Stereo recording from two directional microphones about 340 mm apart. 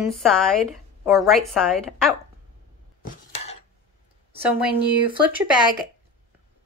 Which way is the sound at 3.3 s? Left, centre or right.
Centre.